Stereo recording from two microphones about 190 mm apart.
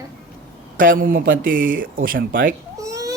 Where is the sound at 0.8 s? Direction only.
45° right (ahead or behind).